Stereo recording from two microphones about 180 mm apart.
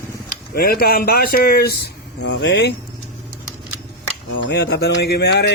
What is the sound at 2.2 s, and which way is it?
Speech, 75° left (ahead or behind).